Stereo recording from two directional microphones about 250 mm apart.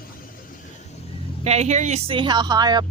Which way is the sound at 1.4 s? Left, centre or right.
Right.